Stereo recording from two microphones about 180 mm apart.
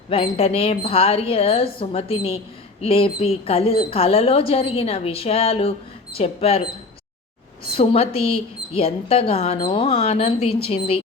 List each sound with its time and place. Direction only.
0.1 s a woman's voice: 30° left (ahead or behind)
7.7 s a woman's voice: 30° left (ahead or behind)